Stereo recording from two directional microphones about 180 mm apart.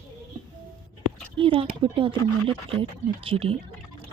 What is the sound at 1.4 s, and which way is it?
A woman's voice, 30° right (ahead or behind).